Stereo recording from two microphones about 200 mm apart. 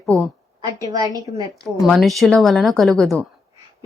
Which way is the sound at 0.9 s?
20° right (ahead or behind).